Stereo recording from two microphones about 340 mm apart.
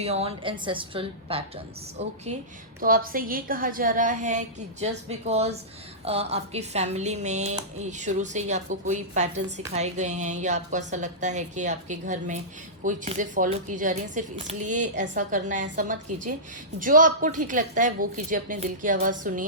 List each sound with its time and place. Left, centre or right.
0.0 s a woman's voice: centre
2.8 s speech: right